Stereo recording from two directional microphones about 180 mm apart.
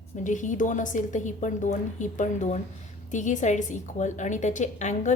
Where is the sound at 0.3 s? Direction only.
45° left (ahead or behind).